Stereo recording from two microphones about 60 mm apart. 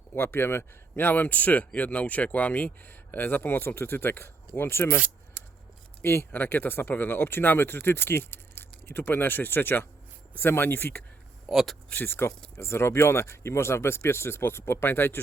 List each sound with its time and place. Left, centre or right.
0.1 s speech: left
6.0 s speech: left
11.4 s speech: centre
12.0 s speech: left